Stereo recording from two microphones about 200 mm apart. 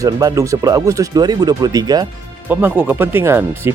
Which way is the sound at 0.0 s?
15° right (ahead or behind).